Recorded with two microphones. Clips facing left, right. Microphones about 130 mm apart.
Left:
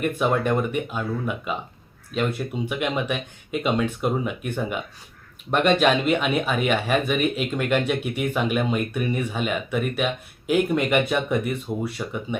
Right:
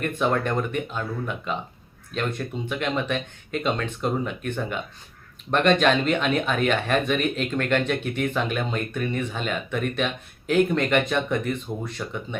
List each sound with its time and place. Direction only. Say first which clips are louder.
0.0 s speech: left 2 dB; 10° left (ahead or behind)